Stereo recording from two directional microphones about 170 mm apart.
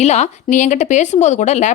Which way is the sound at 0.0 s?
40° left (ahead or behind).